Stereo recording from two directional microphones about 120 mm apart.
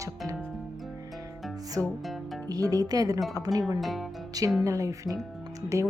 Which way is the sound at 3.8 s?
Centre (ahead or behind).